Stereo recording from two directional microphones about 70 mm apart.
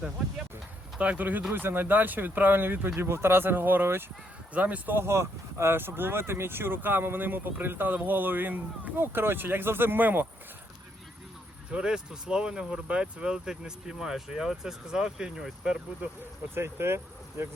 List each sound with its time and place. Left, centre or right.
0.9 s speech: centre
5.0 s speech: right
11.7 s speech: centre
16.6 s speech: right